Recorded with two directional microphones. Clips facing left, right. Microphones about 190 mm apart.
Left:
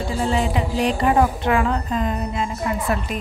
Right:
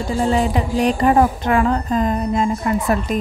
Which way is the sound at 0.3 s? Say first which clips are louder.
Right 3 dB; 45° right (ahead or behind).